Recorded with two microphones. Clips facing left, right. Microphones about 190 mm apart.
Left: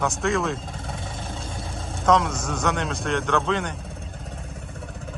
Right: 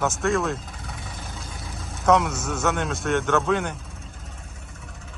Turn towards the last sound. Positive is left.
turn(degrees=-5)  # may be behind; listen again after turning